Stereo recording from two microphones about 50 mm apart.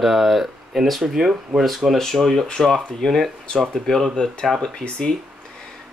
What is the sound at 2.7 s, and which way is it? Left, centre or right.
Speech, centre.